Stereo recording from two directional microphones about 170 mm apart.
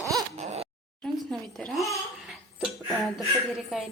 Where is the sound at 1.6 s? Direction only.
Centre (ahead or behind).